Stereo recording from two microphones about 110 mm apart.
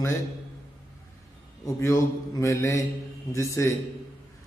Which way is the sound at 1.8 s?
30° left (ahead or behind).